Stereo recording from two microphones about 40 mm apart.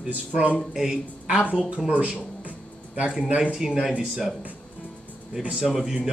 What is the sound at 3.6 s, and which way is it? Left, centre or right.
Speech, centre.